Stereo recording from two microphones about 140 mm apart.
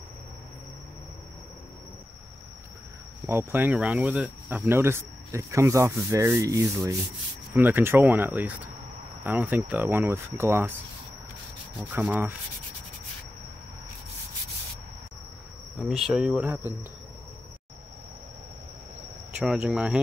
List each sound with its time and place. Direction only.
3.3 s speech: 15° right (ahead or behind)
11.8 s speech: 10° right (ahead or behind)
15.8 s speech: centre (ahead or behind)
19.3 s speech: 5° right (ahead or behind)